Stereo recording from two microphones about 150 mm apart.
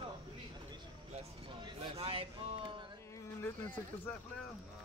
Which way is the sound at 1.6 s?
35° right (ahead or behind).